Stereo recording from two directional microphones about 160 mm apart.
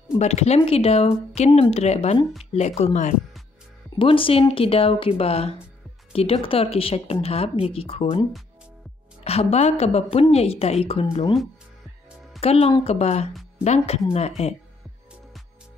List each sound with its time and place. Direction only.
0.2 s a woman's voice: 45° left (ahead or behind)
4.0 s a woman's voice: 35° left (ahead or behind)
12.4 s a woman's voice: 40° left (ahead or behind)